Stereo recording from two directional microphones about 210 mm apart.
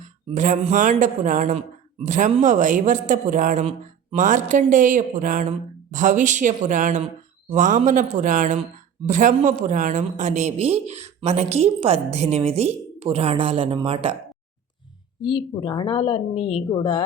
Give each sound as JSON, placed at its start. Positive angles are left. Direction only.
{"t": 0.0, "sound": "a woman's voice", "side_deg": -35}
{"t": 15.2, "sound": "speech", "side_deg": 20}